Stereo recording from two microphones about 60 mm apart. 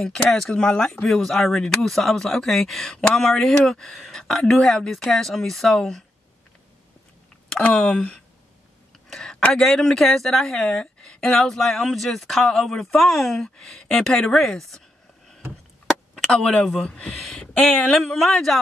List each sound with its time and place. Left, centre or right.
0.0 s speech: centre
3.5 s speech: centre
3.8 s a woman's voice: centre
7.7 s speech: centre
9.1 s a sound: centre
9.5 s a woman's voice: centre
16.3 s speech: centre
17.9 s a woman's voice: centre